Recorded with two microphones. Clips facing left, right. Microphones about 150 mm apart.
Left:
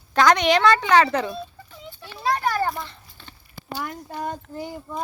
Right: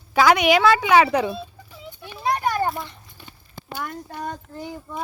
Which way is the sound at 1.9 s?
15° right (ahead or behind).